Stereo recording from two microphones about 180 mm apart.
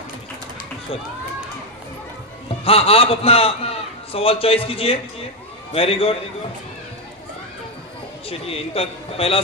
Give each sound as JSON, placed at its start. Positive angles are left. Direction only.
{"t": 2.6, "sound": "a man's voice", "side_deg": 30}
{"t": 8.3, "sound": "a man's voice", "side_deg": 35}